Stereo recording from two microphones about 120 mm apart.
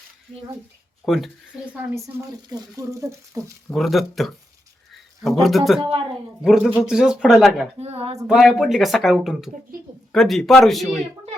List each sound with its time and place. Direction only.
1.0 s speech: centre (ahead or behind)
1.7 s speech: 15° right (ahead or behind)
2.5 s speech: 25° right (ahead or behind)
3.7 s speech: centre (ahead or behind)
7.8 s speech: 60° right (ahead or behind)
8.3 s speech: 5° right (ahead or behind)